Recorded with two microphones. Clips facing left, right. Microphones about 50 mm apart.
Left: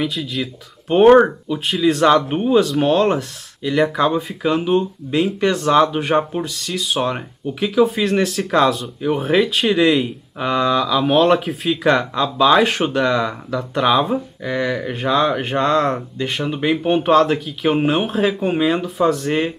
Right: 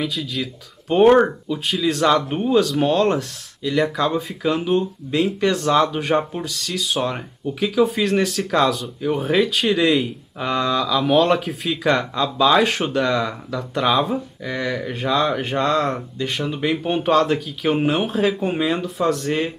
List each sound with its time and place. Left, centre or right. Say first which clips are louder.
0.0 s speech: left 2 dB; centre
18.3 s speech: left 3 dB; centre
18.6 s speech: left 4 dB; centre